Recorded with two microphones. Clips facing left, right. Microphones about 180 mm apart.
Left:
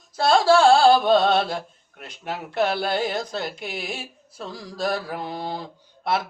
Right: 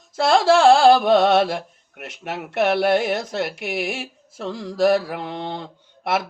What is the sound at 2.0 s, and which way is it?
Speech, 75° right (ahead or behind).